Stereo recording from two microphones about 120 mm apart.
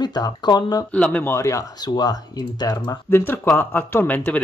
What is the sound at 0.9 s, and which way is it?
Speech, 10° left (ahead or behind).